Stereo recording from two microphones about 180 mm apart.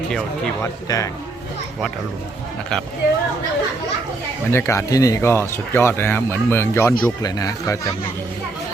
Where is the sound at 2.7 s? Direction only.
Centre (ahead or behind).